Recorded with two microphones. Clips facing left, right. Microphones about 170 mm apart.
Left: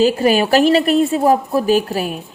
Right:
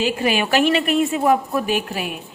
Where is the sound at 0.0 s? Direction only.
40° left (ahead or behind).